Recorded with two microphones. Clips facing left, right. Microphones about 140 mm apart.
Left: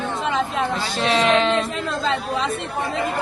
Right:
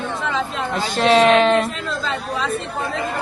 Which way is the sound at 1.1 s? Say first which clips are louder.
Right 5 dB; 55° right (ahead or behind).